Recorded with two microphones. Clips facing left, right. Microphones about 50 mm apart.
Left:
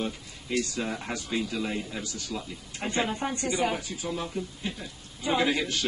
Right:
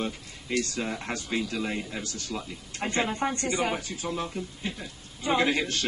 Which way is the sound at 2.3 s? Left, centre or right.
Right.